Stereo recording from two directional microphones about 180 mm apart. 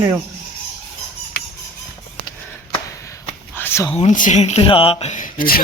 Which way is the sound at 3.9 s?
40° left (ahead or behind).